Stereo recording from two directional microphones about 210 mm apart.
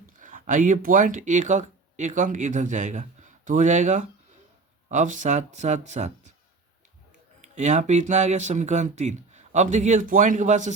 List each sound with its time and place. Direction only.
0.2 s speech: 40° right (ahead or behind)
7.4 s speech: 35° right (ahead or behind)